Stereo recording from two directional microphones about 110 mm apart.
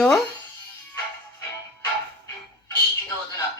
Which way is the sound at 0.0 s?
Centre (ahead or behind).